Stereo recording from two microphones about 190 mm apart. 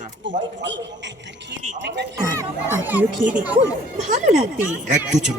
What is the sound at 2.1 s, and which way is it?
A child's voice, 15° right (ahead or behind).